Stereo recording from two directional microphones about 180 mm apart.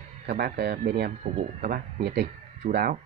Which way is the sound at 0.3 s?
60° right (ahead or behind).